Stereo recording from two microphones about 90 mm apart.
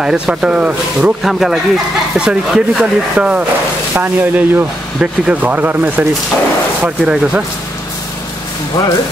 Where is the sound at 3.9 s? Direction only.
20° right (ahead or behind).